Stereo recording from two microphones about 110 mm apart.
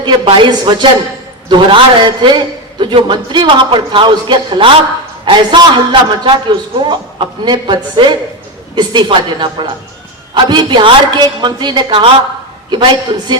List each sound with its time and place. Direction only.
0.3 s a man's voice: 45° right (ahead or behind)